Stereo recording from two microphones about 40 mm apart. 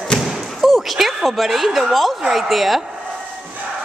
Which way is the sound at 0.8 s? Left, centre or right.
Centre.